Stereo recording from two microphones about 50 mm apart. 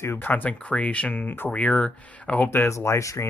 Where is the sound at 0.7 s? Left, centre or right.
Left.